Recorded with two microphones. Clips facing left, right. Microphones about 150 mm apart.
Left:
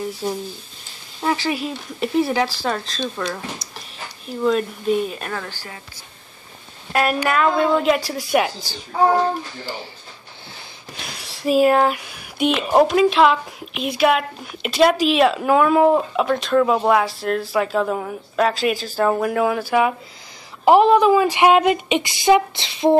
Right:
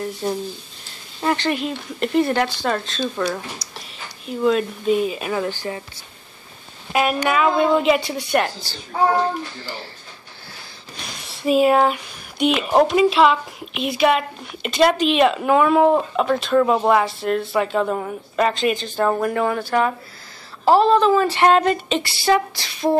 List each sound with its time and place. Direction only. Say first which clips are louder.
0.0 s a woman's voice: right 1 dB; centre (ahead or behind)
5.4 s speech: right 10 dB; 20° right (ahead or behind)
6.9 s a woman's voice: even; 5° right (ahead or behind)
11.1 s a sound: even; centre (ahead or behind)
12.5 s a woman's voice: left 1 dB; centre (ahead or behind); by 22.9 s 20° left (ahead or behind)